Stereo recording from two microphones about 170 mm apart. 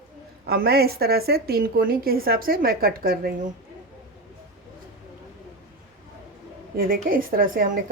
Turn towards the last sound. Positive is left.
turn(degrees=-55)  # may be behind; listen again after turning